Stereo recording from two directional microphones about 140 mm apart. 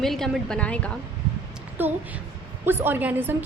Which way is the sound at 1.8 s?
15° right (ahead or behind).